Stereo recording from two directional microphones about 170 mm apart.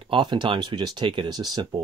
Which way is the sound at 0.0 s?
30° right (ahead or behind).